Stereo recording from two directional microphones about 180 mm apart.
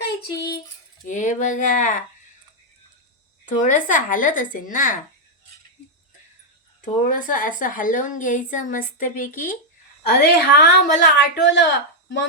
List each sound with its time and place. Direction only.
0.0 s child singing: 65° left (ahead or behind)
1.0 s speech: 45° left (ahead or behind)
3.4 s a woman's voice: 45° left (ahead or behind)
6.8 s a woman's voice: 45° left (ahead or behind); by 12.3 s 90° left